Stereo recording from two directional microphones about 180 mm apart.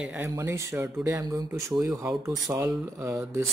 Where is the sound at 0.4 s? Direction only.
15° right (ahead or behind).